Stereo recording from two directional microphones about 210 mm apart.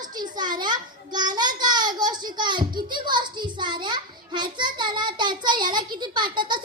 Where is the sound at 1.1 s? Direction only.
20° right (ahead or behind).